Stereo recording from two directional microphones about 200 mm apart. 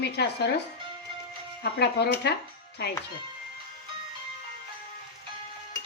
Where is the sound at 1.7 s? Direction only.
55° left (ahead or behind).